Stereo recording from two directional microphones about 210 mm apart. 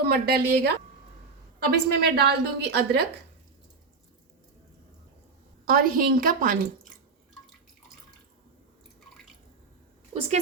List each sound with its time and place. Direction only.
0.0 s a woman's voice: 50° right (ahead or behind)
5.6 s a woman's voice: 45° right (ahead or behind)